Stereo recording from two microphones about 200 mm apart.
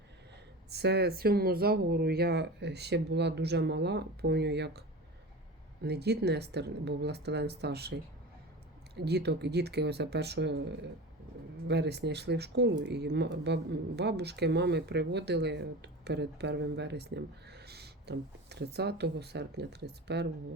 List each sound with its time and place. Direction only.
0.7 s speech: 55° right (ahead or behind)
5.8 s speech: 55° right (ahead or behind)
9.0 s speech: 55° right (ahead or behind)